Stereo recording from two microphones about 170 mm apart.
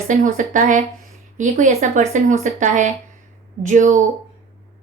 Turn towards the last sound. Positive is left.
turn(degrees=-45)  # may be behind; listen again after turning